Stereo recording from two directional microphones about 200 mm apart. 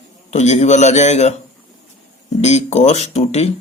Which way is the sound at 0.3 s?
35° left (ahead or behind).